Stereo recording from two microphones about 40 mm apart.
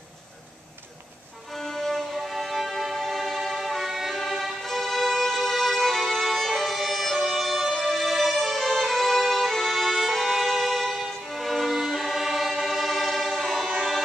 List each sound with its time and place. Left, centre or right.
1.5 s music: centre
4.1 s violin: centre